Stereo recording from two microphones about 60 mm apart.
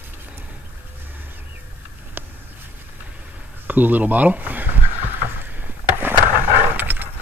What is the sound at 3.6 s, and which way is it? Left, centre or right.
Speech, right.